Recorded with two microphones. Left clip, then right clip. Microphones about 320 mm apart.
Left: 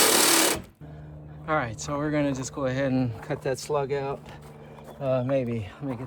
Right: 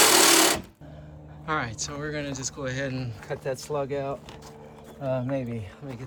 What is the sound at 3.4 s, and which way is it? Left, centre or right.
Speech, left.